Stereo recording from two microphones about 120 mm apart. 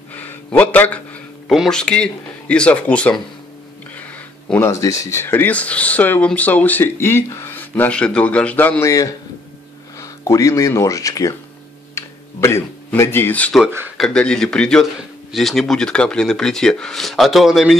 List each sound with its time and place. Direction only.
0.1 s a sound: 15° left (ahead or behind)
1.5 s speech: centre (ahead or behind); by 7.6 s 25° left (ahead or behind)
7.7 s speech: 10° left (ahead or behind)